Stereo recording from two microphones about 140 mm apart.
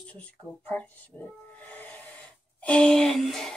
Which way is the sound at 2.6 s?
10° left (ahead or behind).